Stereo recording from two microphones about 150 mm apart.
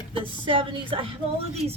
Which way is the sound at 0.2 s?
35° right (ahead or behind).